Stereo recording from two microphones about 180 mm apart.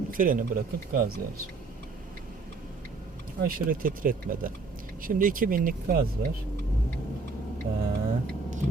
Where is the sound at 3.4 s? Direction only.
50° right (ahead or behind).